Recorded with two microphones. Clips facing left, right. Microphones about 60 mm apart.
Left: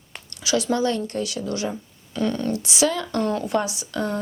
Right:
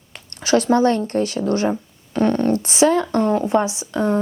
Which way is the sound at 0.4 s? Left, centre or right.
Right.